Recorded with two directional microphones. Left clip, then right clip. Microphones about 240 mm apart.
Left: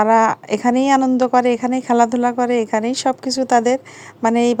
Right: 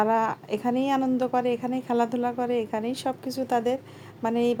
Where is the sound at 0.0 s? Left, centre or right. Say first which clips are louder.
Left 10 dB; left.